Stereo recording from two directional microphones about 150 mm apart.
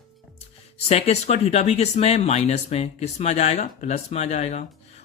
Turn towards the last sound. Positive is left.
turn(degrees=50)  # may be behind; listen again after turning